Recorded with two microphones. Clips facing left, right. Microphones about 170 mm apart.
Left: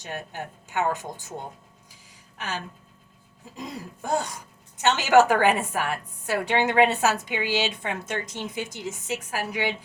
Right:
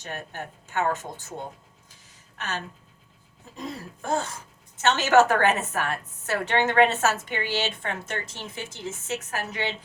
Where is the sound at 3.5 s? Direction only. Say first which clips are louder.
Right 1 dB; 15° left (ahead or behind).